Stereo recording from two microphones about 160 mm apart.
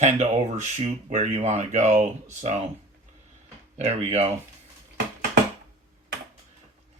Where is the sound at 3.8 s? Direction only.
45° right (ahead or behind).